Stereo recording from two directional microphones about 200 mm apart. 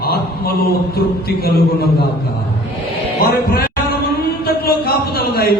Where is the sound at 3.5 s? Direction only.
50° left (ahead or behind).